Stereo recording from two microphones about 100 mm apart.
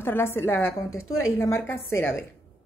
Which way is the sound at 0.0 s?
25° left (ahead or behind).